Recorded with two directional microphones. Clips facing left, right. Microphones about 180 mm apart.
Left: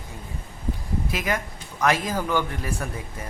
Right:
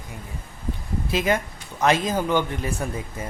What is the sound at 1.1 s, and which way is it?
Speech, 25° right (ahead or behind).